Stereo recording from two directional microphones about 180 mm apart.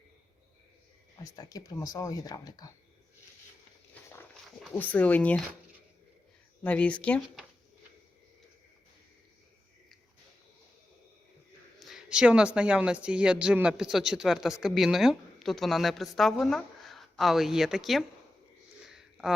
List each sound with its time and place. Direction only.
1.2 s speech: 20° left (ahead or behind)
4.7 s speech: 10° left (ahead or behind)
6.6 s speech: 5° left (ahead or behind)
11.8 s speech: centre (ahead or behind)
18.9 s a sound: centre (ahead or behind)